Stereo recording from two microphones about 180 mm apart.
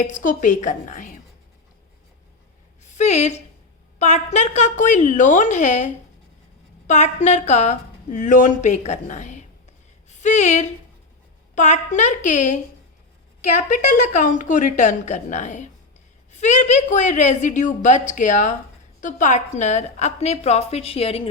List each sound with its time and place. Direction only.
0.2 s a woman's voice: 45° left (ahead or behind)
2.8 s a woman's voice: 40° left (ahead or behind)
13.6 s a woman's voice: 45° left (ahead or behind)